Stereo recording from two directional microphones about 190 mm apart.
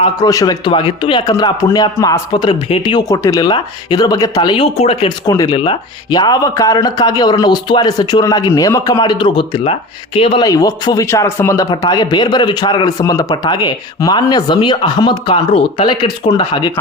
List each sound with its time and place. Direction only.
0.0 s speech: 20° left (ahead or behind)